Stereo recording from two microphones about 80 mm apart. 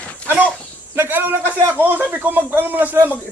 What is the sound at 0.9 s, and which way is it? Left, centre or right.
A man's voice, right.